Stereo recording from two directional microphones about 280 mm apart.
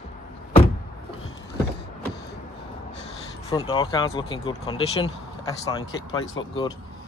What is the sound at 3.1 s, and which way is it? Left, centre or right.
Speech, centre.